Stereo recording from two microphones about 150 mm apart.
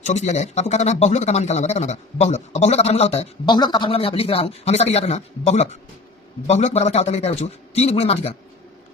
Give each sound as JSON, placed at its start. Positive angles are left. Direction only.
{"t": 0.1, "sound": "speech", "side_deg": 50}
{"t": 3.4, "sound": "speech", "side_deg": 30}